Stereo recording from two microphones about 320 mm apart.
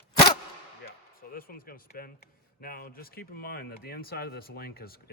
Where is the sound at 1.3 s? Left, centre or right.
Left.